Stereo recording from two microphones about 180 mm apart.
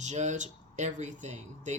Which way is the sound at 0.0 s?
40° right (ahead or behind).